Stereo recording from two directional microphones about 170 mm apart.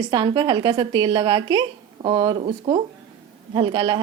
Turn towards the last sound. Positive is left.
turn(degrees=-30)  # may be behind; listen again after turning